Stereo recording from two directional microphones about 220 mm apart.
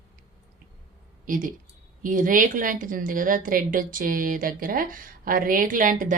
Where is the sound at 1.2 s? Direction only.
35° right (ahead or behind).